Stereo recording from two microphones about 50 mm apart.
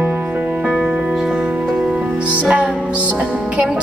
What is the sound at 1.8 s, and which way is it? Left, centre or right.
Music, right.